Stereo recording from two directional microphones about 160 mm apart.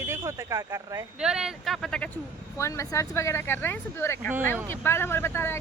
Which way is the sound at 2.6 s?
20° left (ahead or behind).